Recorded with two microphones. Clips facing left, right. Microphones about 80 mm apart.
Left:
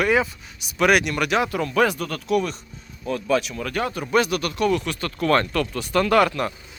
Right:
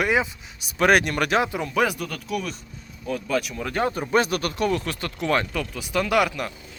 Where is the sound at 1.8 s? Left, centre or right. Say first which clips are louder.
Left 2 dB; centre.